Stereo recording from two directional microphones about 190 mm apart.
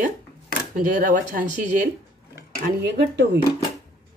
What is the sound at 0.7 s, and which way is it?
Speech, 45° right (ahead or behind).